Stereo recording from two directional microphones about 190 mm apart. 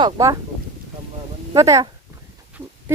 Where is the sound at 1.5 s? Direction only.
15° right (ahead or behind).